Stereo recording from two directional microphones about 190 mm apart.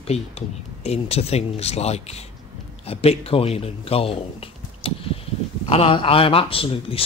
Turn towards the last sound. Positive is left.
turn(degrees=30)  # may be behind; listen again after turning